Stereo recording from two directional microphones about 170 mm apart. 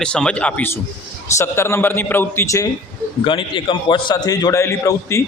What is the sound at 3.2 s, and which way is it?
A man's voice, 30° left (ahead or behind).